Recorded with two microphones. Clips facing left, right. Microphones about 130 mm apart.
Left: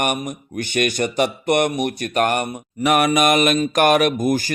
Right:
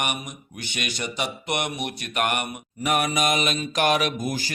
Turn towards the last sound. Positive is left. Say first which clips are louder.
# left 8 dB
turn(degrees=50)  # may be behind; listen again after turning